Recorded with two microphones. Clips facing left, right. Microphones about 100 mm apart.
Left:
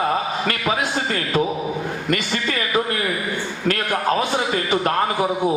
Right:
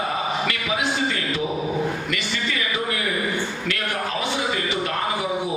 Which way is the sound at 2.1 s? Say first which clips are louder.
Left 4 dB; 45° left (ahead or behind).